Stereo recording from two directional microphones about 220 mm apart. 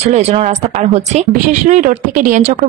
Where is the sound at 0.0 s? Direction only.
30° right (ahead or behind).